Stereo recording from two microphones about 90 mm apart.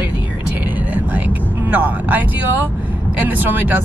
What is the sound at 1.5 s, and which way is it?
Speech, 20° right (ahead or behind).